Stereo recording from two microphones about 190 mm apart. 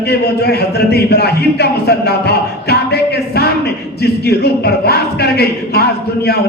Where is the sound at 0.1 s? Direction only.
60° left (ahead or behind).